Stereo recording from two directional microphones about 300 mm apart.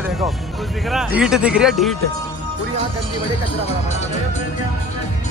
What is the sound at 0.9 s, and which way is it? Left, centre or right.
Speech, centre.